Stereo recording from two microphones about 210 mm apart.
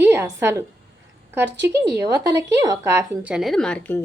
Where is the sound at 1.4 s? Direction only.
55° right (ahead or behind).